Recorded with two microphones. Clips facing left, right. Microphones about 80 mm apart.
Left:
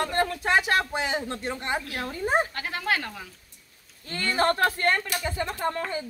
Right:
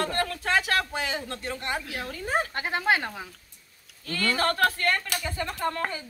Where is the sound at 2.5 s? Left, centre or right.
Right.